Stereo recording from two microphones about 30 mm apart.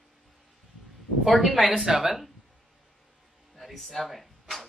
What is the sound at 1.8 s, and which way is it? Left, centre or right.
Speech, right.